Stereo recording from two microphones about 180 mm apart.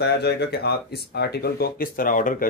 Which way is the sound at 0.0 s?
65° left (ahead or behind).